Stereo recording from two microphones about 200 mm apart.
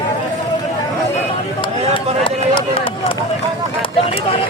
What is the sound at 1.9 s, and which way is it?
Run, 25° left (ahead or behind).